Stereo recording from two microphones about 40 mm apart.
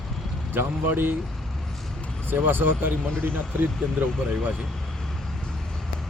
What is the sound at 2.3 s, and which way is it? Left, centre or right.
Speech, right.